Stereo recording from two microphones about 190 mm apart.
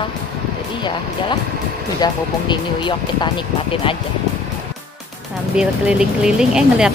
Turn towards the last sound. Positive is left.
turn(degrees=-5)  # may be behind; listen again after turning